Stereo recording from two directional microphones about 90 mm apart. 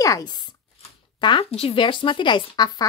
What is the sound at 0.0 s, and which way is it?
Speech, 45° left (ahead or behind).